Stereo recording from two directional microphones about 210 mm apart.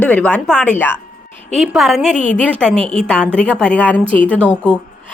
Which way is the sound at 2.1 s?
35° left (ahead or behind).